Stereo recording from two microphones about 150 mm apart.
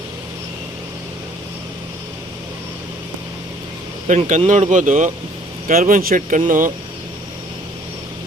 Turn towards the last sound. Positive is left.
turn(degrees=-65)  # may be behind; listen again after turning